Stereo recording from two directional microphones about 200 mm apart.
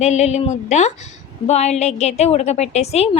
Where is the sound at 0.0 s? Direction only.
35° left (ahead or behind).